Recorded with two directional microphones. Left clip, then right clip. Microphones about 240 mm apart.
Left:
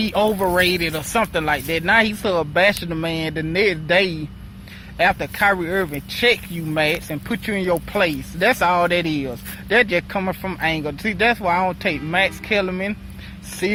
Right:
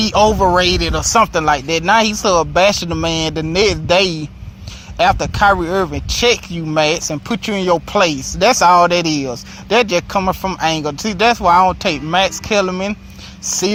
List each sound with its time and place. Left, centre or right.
0.0 s speech: centre